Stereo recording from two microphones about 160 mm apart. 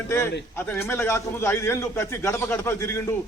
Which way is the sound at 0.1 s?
15° left (ahead or behind).